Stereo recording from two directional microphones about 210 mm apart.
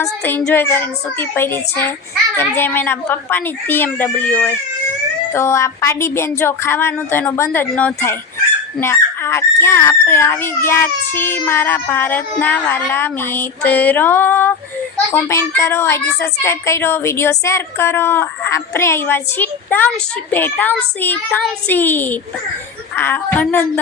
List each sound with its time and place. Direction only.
0.3 s a child's voice: 10° left (ahead or behind)